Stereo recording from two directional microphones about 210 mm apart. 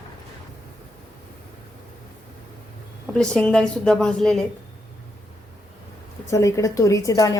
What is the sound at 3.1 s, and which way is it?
A woman's voice, 5° left (ahead or behind).